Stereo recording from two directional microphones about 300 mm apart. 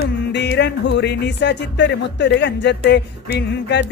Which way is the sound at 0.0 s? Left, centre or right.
Left.